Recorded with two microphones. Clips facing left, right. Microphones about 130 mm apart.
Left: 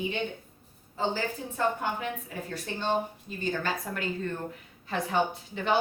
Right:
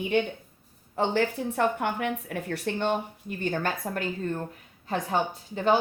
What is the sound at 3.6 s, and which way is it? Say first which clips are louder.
Speech: right 3 dB; 55° right (ahead or behind).